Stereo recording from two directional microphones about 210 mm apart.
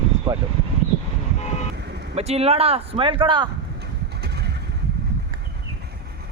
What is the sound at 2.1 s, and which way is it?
A man's voice, 30° right (ahead or behind).